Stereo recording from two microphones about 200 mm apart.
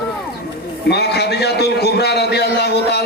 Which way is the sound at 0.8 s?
55° left (ahead or behind).